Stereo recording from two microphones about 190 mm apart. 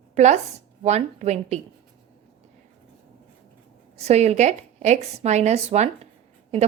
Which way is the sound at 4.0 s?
35° right (ahead or behind).